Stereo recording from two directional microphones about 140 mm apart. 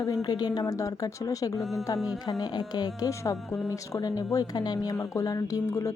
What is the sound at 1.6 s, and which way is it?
Speech, centre (ahead or behind).